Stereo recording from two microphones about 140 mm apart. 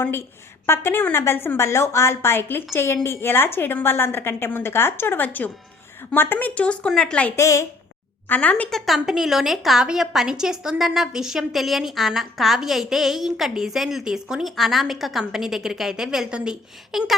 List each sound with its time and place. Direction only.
0.0 s a woman's voice: 15° left (ahead or behind)
7.3 s a woman's voice: 20° left (ahead or behind)
8.3 s a woman's voice: 10° left (ahead or behind)